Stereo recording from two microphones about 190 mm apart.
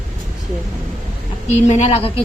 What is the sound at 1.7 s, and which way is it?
Speech, 35° left (ahead or behind).